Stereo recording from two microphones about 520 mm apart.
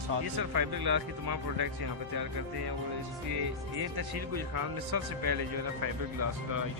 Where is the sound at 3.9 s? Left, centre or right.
Right.